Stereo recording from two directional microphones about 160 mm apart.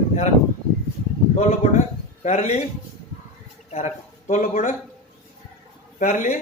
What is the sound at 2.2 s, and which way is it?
Speech, 45° left (ahead or behind).